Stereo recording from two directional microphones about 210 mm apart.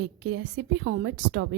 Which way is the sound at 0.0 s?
55° right (ahead or behind).